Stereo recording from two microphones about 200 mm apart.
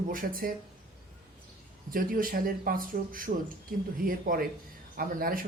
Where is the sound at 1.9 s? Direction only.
45° right (ahead or behind).